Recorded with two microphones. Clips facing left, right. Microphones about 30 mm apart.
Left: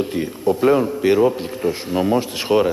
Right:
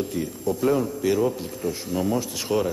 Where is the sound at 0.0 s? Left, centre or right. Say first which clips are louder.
Left 6 dB; left.